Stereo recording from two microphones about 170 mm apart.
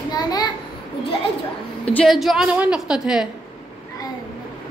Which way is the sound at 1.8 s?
5° left (ahead or behind).